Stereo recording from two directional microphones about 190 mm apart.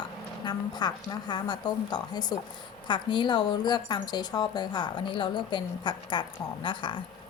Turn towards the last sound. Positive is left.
turn(degrees=25)  # may be behind; listen again after turning